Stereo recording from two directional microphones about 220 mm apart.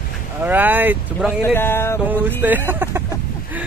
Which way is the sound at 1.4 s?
10° left (ahead or behind).